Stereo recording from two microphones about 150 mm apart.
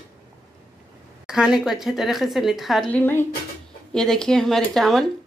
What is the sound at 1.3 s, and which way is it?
A woman's voice, 5° right (ahead or behind).